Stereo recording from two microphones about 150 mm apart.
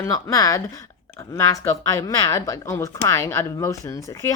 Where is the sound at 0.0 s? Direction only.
20° left (ahead or behind).